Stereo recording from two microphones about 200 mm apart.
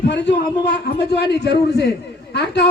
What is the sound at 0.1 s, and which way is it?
A man's voice, 60° left (ahead or behind).